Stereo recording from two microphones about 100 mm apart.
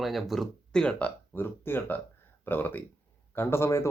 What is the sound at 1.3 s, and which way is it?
Speech, 20° left (ahead or behind).